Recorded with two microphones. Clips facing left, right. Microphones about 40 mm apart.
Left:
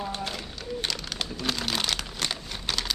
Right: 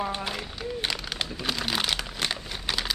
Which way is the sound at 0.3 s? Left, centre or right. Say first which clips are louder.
Right 2 dB; centre.